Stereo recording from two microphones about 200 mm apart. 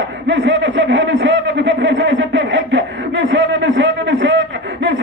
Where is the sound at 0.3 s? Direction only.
65° right (ahead or behind).